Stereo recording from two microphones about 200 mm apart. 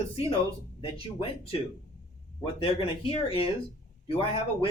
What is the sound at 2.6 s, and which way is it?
Speech, 25° left (ahead or behind).